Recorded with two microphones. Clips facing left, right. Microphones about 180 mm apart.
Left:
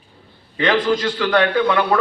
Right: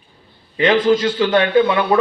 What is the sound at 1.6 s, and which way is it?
Speech, 10° right (ahead or behind).